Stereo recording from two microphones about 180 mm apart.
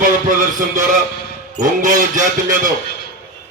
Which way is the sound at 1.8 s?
45° right (ahead or behind).